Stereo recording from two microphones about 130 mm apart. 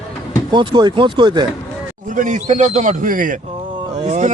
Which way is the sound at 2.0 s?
85° right.